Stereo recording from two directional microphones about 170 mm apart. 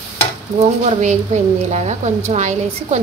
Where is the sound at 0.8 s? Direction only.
40° right (ahead or behind).